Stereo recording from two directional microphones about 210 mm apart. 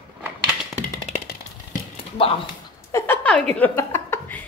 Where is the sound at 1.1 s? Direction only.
40° left (ahead or behind).